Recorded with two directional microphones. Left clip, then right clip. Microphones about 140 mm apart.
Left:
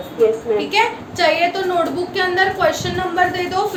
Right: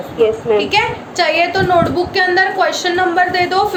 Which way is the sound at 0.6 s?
45° right (ahead or behind).